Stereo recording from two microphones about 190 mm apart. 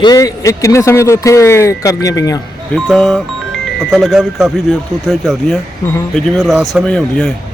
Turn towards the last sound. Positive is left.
turn(degrees=5)  # may be behind; listen again after turning